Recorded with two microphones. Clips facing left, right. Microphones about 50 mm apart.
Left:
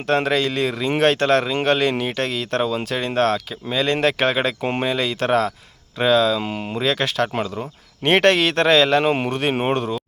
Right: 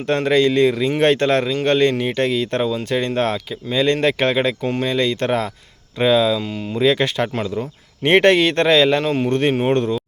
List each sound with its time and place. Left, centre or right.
0.0 s speech: centre
4.6 s speech: left
4.9 s speech: centre
6.4 s speech: left
6.7 s speech: centre
9.0 s speech: centre
9.3 s speech: centre